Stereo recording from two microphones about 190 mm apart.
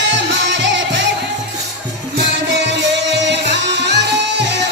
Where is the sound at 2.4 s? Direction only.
65° right (ahead or behind).